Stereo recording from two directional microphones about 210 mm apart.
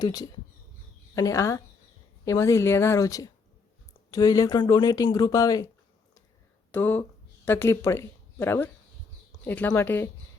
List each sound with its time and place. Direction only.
0.0 s speech: 20° left (ahead or behind)
6.7 s speech: 10° left (ahead or behind)